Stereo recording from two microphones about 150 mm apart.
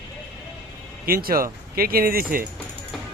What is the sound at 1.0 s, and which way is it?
Speech, 75° right (ahead or behind).